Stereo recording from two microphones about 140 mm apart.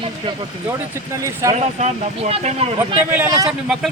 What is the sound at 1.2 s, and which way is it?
Speech, 25° right (ahead or behind).